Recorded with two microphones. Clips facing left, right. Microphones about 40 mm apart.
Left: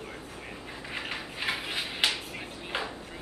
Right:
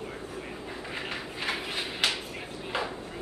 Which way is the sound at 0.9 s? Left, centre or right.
Centre.